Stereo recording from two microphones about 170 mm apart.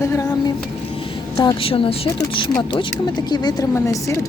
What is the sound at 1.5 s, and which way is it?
Speech, 30° left (ahead or behind).